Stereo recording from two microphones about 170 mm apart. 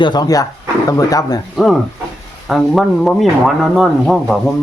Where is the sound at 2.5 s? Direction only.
Centre (ahead or behind).